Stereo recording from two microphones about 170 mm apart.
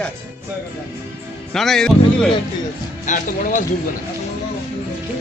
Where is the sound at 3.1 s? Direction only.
45° left (ahead or behind).